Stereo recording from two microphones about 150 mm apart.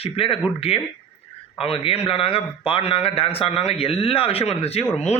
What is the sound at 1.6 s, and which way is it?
A man's voice, 40° left (ahead or behind).